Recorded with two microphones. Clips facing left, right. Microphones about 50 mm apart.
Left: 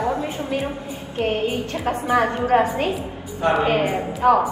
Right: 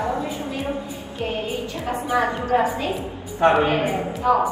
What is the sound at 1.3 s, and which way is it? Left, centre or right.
A woman's voice, left.